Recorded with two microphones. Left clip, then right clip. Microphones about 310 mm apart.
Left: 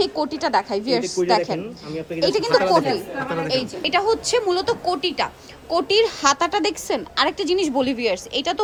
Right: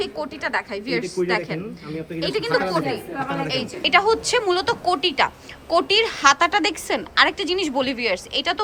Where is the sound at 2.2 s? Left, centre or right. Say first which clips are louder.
Left 4 dB; centre.